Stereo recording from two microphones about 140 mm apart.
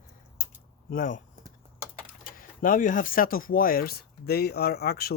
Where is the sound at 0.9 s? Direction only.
75° left (ahead or behind); by 5.2 s 90° left.